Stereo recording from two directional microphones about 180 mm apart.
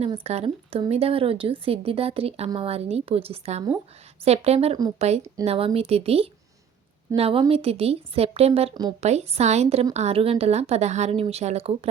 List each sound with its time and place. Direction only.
0.0 s a woman's voice: 35° right (ahead or behind)